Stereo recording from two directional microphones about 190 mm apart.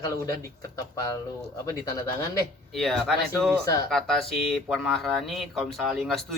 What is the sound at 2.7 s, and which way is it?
Speech, centre (ahead or behind).